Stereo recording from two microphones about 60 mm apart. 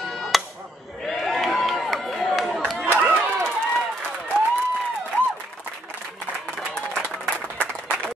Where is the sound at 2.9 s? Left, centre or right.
Right.